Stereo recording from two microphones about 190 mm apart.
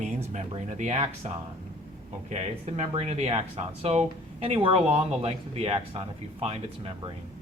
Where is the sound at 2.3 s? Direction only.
35° right (ahead or behind).